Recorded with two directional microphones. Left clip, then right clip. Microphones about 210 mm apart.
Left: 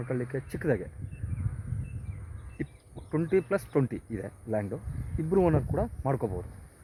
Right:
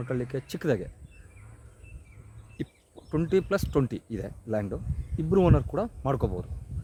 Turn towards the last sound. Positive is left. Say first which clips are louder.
# right 2 dB
turn(degrees=-10)  # may be behind; listen again after turning